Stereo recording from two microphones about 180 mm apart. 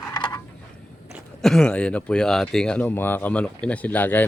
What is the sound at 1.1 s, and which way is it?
Speech, centre (ahead or behind).